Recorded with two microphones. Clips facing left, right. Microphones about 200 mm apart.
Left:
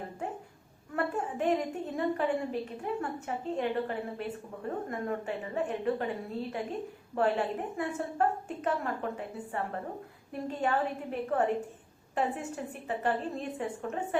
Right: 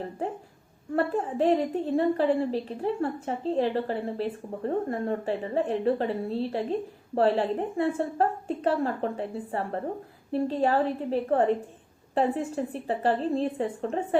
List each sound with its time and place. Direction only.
0.9 s a woman's voice: 30° right (ahead or behind)